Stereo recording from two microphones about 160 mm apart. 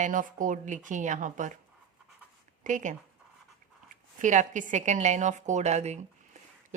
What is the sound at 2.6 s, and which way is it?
A woman's voice, 50° right (ahead or behind).